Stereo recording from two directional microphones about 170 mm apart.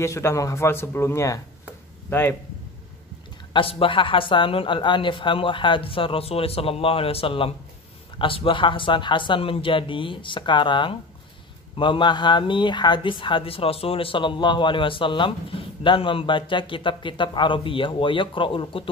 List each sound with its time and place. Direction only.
0.0 s a man's voice: 15° left (ahead or behind)
3.5 s speech: 30° left (ahead or behind)